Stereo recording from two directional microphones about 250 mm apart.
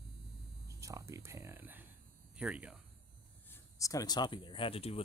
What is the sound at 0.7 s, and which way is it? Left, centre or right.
Speech, centre.